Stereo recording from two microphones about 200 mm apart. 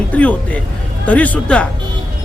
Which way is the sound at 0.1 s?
5° left (ahead or behind).